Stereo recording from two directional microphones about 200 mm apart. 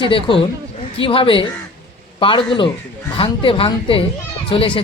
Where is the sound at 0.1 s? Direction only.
25° left (ahead or behind).